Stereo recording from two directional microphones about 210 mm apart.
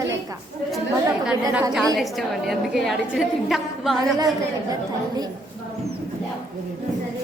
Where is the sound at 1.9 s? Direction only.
Centre (ahead or behind).